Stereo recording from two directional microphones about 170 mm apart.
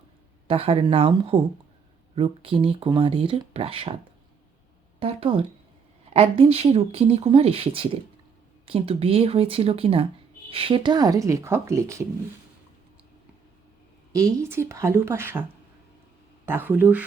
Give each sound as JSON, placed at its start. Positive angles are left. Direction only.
{"t": 0.4, "sound": "speech", "side_deg": -35}
{"t": 4.9, "sound": "speech", "side_deg": -35}
{"t": 14.1, "sound": "speech", "side_deg": -20}
{"t": 16.5, "sound": "speech", "side_deg": -10}